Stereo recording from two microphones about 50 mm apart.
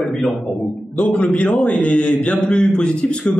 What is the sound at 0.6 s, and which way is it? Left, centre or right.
A man's voice, left.